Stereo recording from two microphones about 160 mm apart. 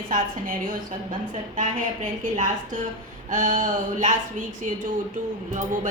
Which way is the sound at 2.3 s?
50° right (ahead or behind).